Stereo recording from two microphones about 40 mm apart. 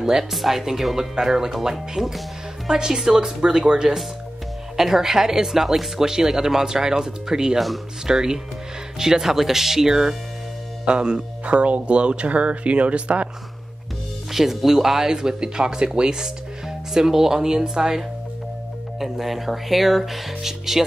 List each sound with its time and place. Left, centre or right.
0.0 s a woman's voice: centre
4.7 s speech: centre
7.5 s speech: centre
8.1 s speech: centre
10.9 s speech: right
14.3 s speech: centre